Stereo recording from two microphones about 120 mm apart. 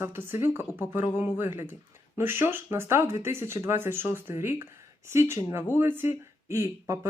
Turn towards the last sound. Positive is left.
turn(degrees=-25)  # may be behind; listen again after turning